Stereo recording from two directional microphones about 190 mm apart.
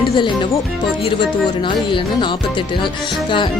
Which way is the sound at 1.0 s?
25° left (ahead or behind).